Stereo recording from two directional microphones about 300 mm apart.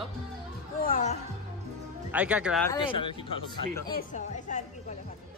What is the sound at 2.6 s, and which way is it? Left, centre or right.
A woman's voice, centre.